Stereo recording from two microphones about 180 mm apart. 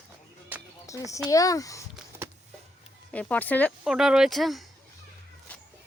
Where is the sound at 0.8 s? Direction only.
20° left (ahead or behind).